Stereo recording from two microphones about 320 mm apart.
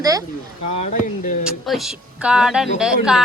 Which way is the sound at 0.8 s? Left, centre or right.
Left.